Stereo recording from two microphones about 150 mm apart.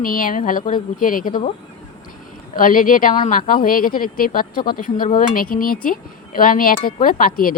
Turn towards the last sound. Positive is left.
turn(degrees=70)  # may be behind; listen again after turning